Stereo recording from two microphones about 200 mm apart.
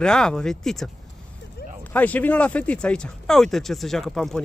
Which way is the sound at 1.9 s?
10° left (ahead or behind).